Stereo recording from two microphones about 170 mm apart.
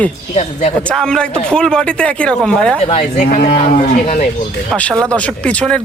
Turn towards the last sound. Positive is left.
turn(degrees=5)  # may be behind; listen again after turning